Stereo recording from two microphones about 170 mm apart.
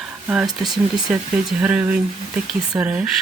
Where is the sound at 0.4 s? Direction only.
25° right (ahead or behind).